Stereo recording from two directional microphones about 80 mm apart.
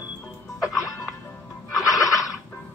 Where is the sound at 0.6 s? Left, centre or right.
Left.